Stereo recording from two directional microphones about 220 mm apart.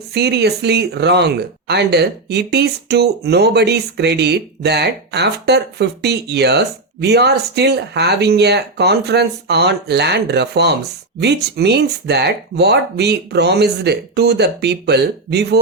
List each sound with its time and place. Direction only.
0.1 s speech: 50° right (ahead or behind)